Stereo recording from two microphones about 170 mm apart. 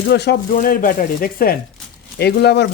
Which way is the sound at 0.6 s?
55° left (ahead or behind).